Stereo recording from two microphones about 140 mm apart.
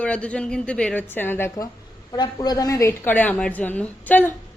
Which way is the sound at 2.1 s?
30° left (ahead or behind).